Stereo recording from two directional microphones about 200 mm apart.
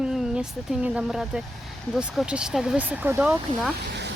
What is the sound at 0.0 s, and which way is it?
A woman's voice, centre (ahead or behind).